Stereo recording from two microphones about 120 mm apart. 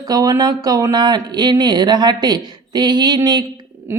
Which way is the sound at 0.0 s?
30° right (ahead or behind).